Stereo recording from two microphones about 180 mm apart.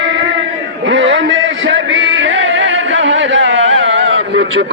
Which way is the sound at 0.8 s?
90° right.